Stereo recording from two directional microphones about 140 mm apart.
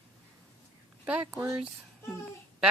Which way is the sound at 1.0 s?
10° right (ahead or behind).